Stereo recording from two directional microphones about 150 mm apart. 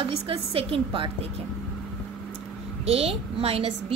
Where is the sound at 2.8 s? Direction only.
40° right (ahead or behind).